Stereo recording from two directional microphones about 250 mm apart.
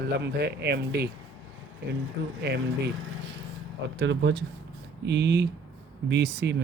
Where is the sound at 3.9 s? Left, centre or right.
Right.